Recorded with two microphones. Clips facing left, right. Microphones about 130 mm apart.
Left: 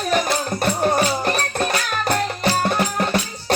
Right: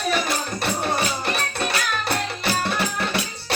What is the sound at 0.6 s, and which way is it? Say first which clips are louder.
Music: left 6 dB; 45° left (ahead or behind).